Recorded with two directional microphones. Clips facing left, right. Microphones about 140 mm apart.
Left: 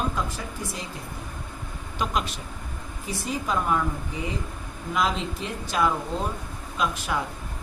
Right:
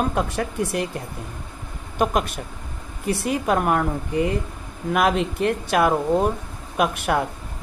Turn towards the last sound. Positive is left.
turn(degrees=-60)  # may be behind; listen again after turning